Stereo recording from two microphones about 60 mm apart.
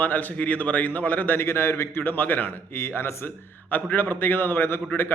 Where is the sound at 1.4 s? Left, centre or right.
Left.